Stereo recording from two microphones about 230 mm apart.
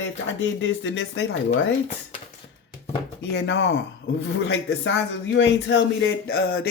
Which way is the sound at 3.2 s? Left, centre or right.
Left.